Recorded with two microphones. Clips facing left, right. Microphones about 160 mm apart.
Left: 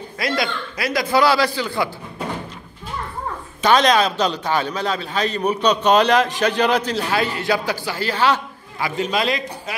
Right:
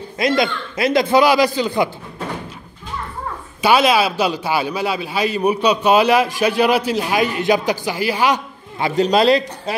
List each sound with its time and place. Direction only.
0.2 s a man's voice: 20° right (ahead or behind)
3.6 s a man's voice: 5° right (ahead or behind)
8.9 s speech: 35° right (ahead or behind)